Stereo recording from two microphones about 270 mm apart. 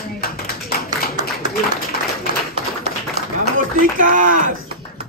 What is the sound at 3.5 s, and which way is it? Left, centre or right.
Speech, right.